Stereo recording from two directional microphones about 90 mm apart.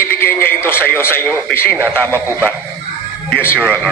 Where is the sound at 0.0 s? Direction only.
25° left (ahead or behind).